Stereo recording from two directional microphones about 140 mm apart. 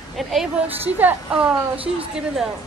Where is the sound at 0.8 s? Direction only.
15° right (ahead or behind).